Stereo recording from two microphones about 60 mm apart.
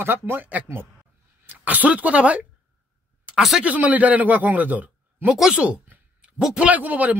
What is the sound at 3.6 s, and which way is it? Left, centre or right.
A man's voice, right.